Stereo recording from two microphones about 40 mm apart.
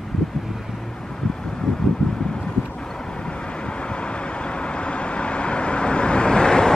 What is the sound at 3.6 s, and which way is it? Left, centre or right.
Vehicle, left.